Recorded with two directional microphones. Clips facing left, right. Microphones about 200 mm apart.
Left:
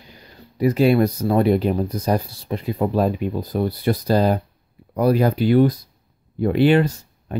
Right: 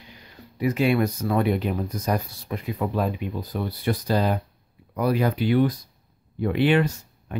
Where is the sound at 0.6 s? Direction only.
35° left (ahead or behind).